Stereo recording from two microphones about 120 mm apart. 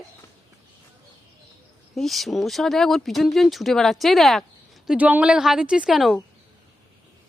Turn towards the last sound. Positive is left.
turn(degrees=0)  # may be behind; listen again after turning